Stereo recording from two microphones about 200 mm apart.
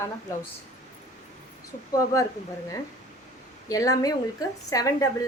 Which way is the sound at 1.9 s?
15° left (ahead or behind).